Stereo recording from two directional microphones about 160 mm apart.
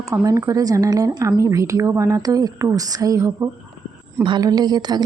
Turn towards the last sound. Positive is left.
turn(degrees=-25)  # may be behind; listen again after turning